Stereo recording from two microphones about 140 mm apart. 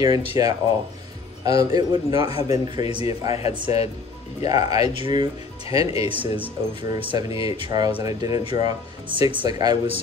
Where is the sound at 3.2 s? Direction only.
45° left (ahead or behind).